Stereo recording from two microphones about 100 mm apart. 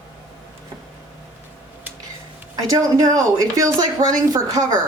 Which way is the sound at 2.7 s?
35° right (ahead or behind).